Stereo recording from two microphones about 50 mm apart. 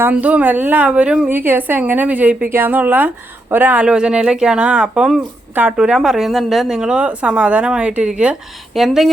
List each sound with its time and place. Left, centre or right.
0.1 s a woman's voice: right
0.9 s speech: right
1.3 s a woman's voice: right
2.5 s a woman's voice: right
3.8 s speech: centre
5.7 s speech: centre
6.7 s speech: centre
8.7 s speech: centre